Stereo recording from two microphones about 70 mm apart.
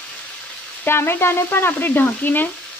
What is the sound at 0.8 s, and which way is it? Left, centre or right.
Frying, left.